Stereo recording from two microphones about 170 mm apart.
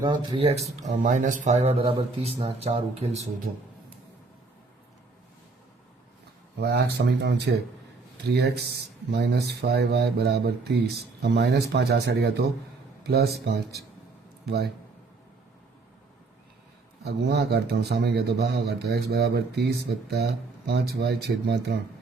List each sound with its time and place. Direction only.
0.0 s speech: 25° right (ahead or behind)
6.6 s speech: 75° right (ahead or behind)
8.3 s speech: 75° right (ahead or behind)
17.0 s speech: 75° right (ahead or behind)
20.7 s speech: 75° right (ahead or behind)